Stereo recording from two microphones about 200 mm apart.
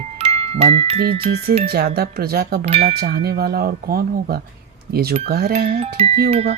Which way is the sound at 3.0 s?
55° right (ahead or behind).